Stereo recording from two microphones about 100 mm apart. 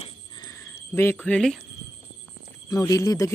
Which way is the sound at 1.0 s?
25° left (ahead or behind).